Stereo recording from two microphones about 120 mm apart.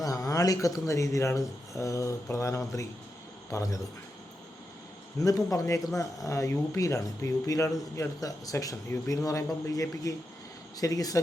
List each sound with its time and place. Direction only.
0.0 s speech: 30° left (ahead or behind)
5.2 s speech: 30° left (ahead or behind)